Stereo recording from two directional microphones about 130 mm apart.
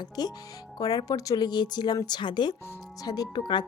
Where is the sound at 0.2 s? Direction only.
30° left (ahead or behind).